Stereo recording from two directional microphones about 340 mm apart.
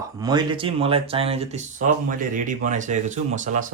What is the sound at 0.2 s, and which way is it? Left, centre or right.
Speech, centre.